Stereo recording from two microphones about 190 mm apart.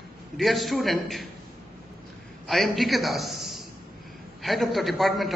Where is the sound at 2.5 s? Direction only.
Centre (ahead or behind).